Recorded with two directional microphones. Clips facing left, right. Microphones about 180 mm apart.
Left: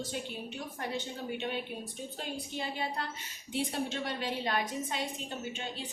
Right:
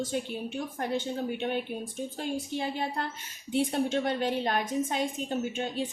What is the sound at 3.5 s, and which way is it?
A woman's voice, 50° right (ahead or behind).